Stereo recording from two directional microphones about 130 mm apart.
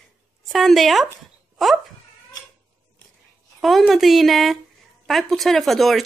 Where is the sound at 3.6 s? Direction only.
Centre (ahead or behind).